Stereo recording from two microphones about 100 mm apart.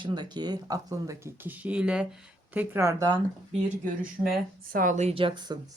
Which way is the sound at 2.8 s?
35° right (ahead or behind).